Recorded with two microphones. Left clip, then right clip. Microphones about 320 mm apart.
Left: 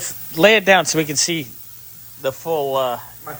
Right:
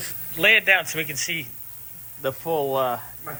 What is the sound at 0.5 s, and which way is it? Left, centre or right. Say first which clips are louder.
Speech: left 2 dB; left.